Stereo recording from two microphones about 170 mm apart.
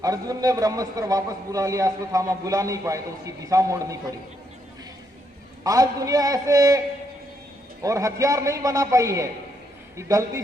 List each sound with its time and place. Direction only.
0.0 s a man's voice: 20° right (ahead or behind)
5.6 s a man's voice: 20° right (ahead or behind)